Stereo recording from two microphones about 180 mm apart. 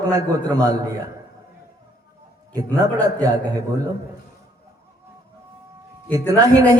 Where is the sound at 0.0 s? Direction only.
20° right (ahead or behind).